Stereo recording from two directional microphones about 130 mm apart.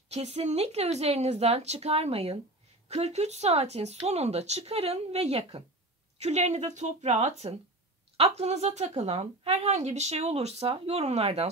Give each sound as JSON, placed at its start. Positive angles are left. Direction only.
{"t": 0.1, "sound": "a woman's voice", "side_deg": -55}